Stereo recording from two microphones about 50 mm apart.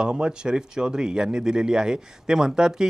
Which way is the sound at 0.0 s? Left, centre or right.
Centre.